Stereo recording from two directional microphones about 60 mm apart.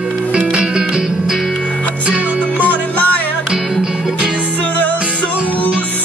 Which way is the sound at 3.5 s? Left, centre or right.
Centre.